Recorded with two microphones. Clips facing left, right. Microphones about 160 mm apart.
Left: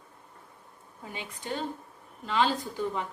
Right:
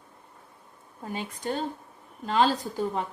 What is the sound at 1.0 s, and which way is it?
Speech, 45° right (ahead or behind).